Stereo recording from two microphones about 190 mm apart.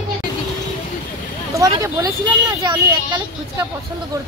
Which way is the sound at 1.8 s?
20° right (ahead or behind).